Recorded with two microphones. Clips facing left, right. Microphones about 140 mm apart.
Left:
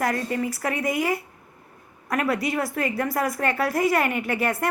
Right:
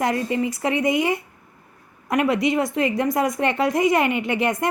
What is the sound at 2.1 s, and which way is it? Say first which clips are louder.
A woman's voice: right 5 dB; 20° right (ahead or behind).